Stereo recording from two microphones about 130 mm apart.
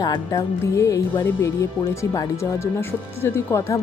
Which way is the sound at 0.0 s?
30° left (ahead or behind).